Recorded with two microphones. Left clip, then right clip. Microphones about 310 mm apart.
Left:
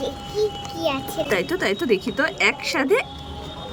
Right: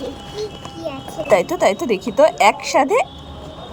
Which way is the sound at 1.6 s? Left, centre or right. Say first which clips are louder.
Right 4 dB; centre.